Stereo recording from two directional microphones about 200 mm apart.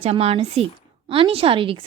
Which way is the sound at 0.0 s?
30° right (ahead or behind).